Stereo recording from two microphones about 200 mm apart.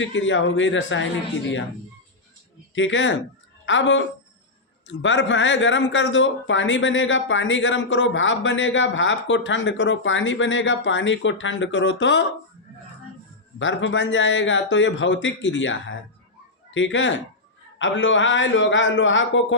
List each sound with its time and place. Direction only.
0.0 s speech: 70° left (ahead or behind)
2.7 s speech: 70° left (ahead or behind)
13.6 s speech: 70° left (ahead or behind)